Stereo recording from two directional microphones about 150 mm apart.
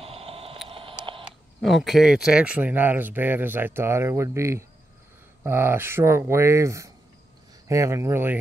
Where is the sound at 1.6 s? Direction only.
Centre (ahead or behind).